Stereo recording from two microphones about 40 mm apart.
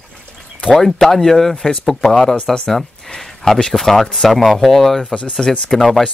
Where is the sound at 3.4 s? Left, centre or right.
Centre.